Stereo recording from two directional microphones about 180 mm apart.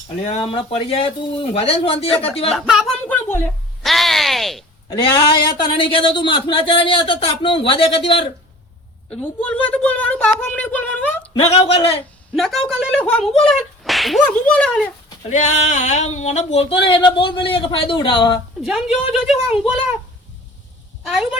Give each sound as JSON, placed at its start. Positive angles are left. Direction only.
{"t": 0.3, "sound": "speech", "side_deg": 30}
{"t": 2.5, "sound": "speech", "side_deg": 0}
{"t": 3.8, "sound": "a sound", "side_deg": 0}
{"t": 4.9, "sound": "speech", "side_deg": 30}
{"t": 9.0, "sound": "a woman's voice", "side_deg": 5}
{"t": 11.6, "sound": "speech", "side_deg": 30}
{"t": 12.3, "sound": "a woman's voice", "side_deg": 0}
{"t": 15.3, "sound": "speech", "side_deg": 40}
{"t": 19.1, "sound": "speech", "side_deg": 0}
{"t": 21.1, "sound": "speech", "side_deg": 0}